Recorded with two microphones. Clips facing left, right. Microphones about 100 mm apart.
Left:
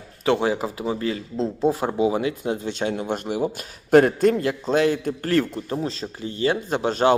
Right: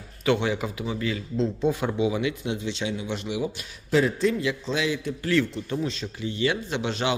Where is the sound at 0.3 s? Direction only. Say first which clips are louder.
Left 3 dB; 35° left (ahead or behind).